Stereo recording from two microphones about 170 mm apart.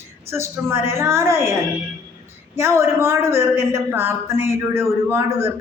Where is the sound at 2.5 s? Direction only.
15° right (ahead or behind).